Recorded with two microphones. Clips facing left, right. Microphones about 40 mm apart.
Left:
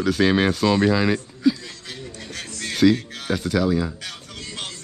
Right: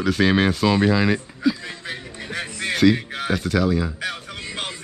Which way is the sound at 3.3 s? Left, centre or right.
Centre.